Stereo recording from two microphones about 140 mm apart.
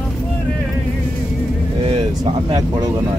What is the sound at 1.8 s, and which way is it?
Vehicle, 35° right (ahead or behind).